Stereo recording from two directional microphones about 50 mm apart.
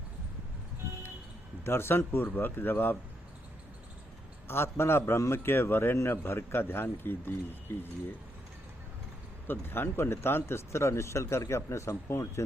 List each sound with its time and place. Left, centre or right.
1.6 s a man's voice: left
4.4 s a man's voice: left
9.5 s speech: left